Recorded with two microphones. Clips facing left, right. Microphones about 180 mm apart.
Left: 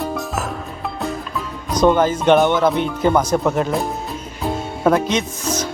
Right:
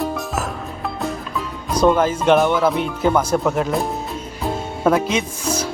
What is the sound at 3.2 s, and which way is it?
Speech, 5° right (ahead or behind).